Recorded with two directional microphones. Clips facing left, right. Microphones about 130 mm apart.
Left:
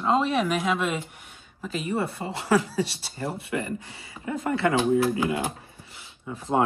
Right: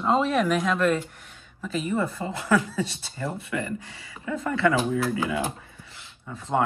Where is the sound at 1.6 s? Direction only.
30° left (ahead or behind).